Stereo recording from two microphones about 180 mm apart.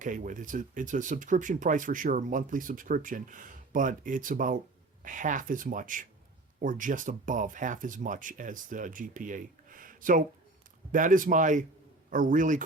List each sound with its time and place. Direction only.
0.0 s speech: 45° right (ahead or behind)